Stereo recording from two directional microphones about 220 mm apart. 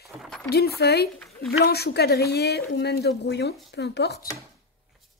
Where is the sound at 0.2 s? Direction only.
5° left (ahead or behind).